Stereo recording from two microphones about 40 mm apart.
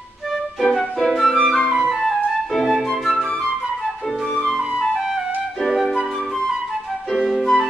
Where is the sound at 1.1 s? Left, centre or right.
Centre.